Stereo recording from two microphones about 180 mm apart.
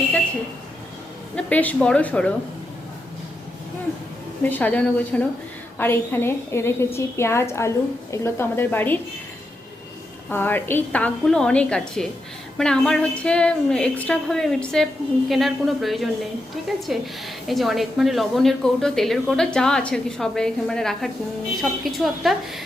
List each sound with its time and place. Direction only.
1.4 s a woman's voice: 10° left (ahead or behind)
4.4 s a woman's voice: 10° left (ahead or behind)
10.2 s a woman's voice: 10° left (ahead or behind)